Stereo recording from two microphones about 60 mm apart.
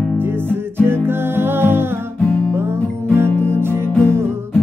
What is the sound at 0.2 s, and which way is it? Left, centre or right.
Music, right.